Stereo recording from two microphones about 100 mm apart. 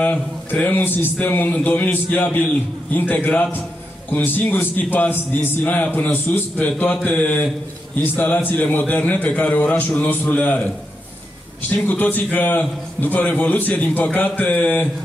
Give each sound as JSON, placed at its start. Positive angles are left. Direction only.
{"t": 0.0, "sound": "a man's voice", "side_deg": 15}
{"t": 11.7, "sound": "a man's voice", "side_deg": 15}